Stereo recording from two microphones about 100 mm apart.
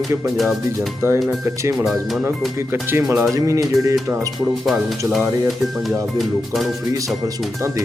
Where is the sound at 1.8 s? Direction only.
Centre (ahead or behind).